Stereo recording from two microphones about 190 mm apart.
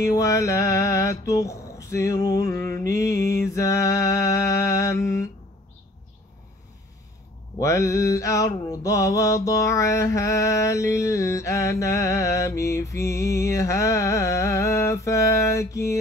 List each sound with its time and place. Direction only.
0.0 s mantra: 15° left (ahead or behind)
7.5 s mantra: 15° left (ahead or behind)